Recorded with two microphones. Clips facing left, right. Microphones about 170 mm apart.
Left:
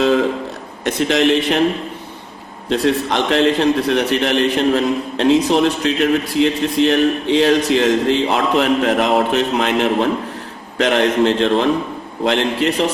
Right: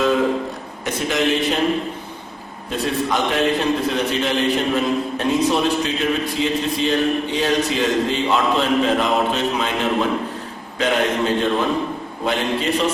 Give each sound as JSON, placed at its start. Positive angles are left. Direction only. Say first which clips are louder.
{"t": 0.9, "sound": "a man's voice", "louder": "left 5 dB", "side_deg": 80}
{"t": 2.6, "sound": "a man's voice", "louder": "left 5 dB", "side_deg": 80}